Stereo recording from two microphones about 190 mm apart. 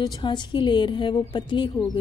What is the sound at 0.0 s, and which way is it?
Speech, 25° left (ahead or behind).